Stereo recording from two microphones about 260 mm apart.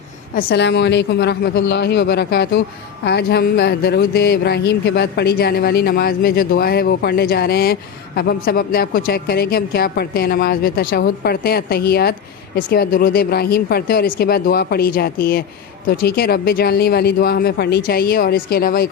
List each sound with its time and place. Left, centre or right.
0.3 s a woman's voice: left